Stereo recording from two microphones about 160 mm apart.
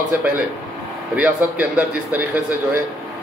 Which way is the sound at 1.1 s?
10° right (ahead or behind).